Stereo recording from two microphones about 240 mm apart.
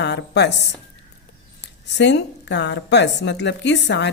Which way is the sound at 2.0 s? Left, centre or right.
Left.